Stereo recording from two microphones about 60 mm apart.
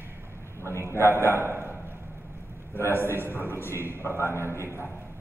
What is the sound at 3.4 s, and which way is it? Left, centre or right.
Speech, left.